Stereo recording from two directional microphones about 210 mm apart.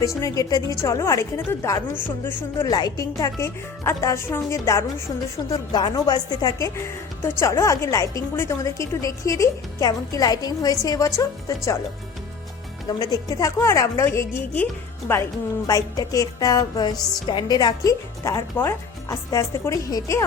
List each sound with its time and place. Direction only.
0.2 s a woman's voice: 15° left (ahead or behind)
12.9 s a woman's voice: 15° left (ahead or behind)